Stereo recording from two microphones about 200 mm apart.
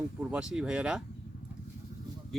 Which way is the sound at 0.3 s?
5° right (ahead or behind).